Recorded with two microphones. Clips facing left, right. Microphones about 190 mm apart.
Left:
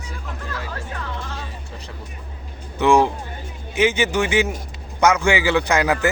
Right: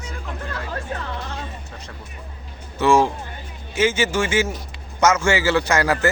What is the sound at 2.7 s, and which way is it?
A man's voice, 15° left (ahead or behind).